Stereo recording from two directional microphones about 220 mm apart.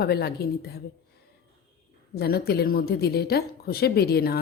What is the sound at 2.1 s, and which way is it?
A woman's voice, 45° left (ahead or behind).